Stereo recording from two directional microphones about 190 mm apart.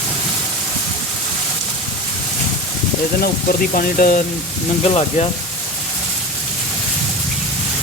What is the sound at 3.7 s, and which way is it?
Speech, 50° left (ahead or behind).